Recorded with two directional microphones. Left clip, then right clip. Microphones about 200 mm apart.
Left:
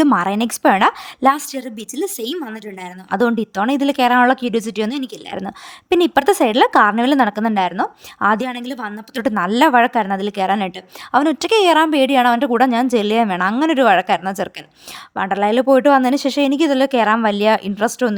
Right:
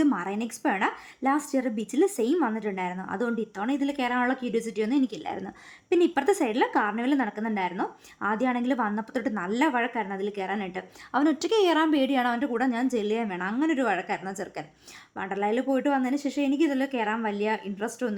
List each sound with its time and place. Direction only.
0.0 s speech: 50° left (ahead or behind)